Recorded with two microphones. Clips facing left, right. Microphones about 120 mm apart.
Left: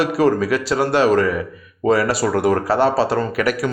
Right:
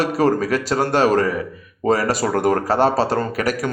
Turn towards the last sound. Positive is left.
turn(degrees=-40)  # may be behind; listen again after turning